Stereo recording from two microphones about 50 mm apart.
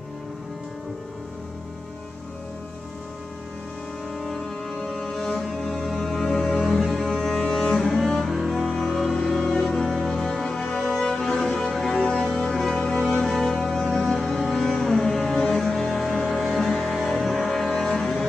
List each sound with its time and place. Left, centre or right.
4.2 s music: centre
6.8 s cello: centre
8.5 s music: centre